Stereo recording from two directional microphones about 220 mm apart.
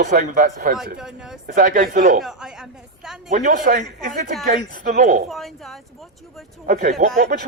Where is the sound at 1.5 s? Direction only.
40° right (ahead or behind).